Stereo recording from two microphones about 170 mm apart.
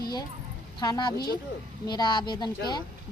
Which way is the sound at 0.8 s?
25° left (ahead or behind).